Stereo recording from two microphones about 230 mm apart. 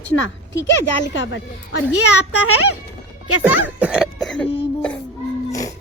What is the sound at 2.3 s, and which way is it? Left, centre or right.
Speech, left.